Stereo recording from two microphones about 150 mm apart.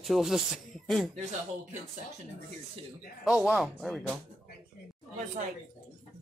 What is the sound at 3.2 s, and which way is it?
Speech, 5° right (ahead or behind).